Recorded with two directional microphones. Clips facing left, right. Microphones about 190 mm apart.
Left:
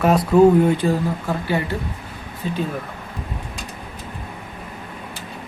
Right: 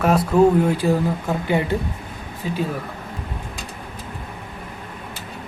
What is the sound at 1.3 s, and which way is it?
Speech, 20° right (ahead or behind).